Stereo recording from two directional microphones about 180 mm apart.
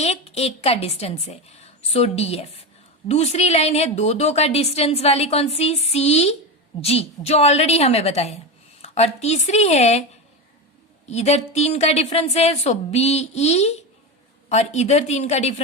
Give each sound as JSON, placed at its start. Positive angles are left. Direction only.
{"t": 0.0, "sound": "a woman's voice", "side_deg": 35}
{"t": 11.1, "sound": "a woman's voice", "side_deg": 35}